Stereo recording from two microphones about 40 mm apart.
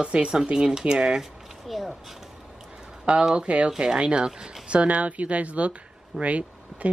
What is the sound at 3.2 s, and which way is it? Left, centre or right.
Speech, right.